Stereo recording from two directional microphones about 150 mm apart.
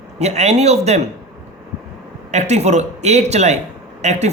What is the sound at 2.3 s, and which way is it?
Speech, 50° right (ahead or behind).